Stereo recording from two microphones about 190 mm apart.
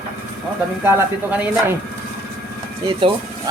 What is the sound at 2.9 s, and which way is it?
Speech, 25° right (ahead or behind).